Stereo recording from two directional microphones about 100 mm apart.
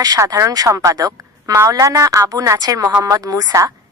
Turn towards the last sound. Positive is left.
turn(degrees=-35)  # may be behind; listen again after turning